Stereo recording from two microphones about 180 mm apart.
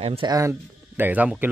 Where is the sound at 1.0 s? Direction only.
10° right (ahead or behind).